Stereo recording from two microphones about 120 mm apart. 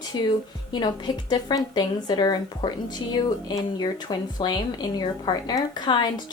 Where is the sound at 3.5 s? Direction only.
35° left (ahead or behind).